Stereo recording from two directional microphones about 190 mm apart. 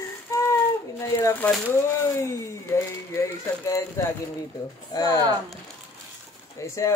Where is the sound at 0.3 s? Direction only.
15° left (ahead or behind).